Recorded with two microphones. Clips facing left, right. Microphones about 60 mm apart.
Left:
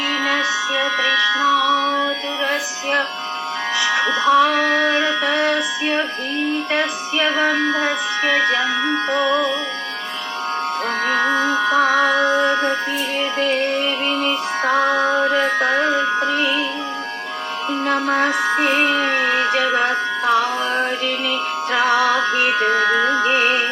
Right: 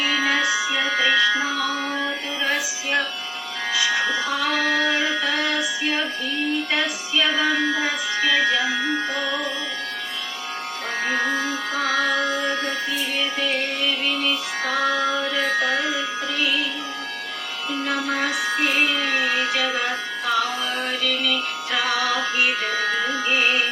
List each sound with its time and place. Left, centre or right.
0.1 s music: centre
3.9 s music: left
11.0 s music: left
14.2 s music: left
17.7 s music: left
21.2 s music: left